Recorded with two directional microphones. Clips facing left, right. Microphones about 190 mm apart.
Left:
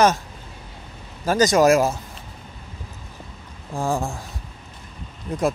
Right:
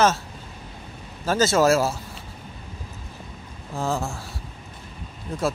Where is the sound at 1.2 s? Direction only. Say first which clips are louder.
Left 3 dB; 15° left (ahead or behind).